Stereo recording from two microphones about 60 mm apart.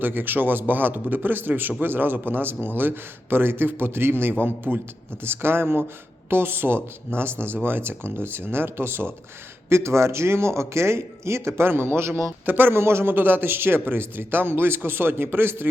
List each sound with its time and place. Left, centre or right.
0.0 s a man's voice: right
12.5 s a man's voice: right